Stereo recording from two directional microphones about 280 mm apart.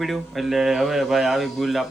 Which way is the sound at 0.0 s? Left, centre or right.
Centre.